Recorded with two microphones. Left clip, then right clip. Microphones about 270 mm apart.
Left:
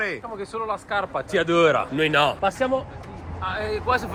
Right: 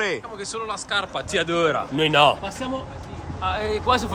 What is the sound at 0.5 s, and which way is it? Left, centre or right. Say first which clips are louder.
A man's voice: even; centre.